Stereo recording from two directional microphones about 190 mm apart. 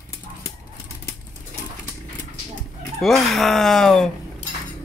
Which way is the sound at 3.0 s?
Centre (ahead or behind).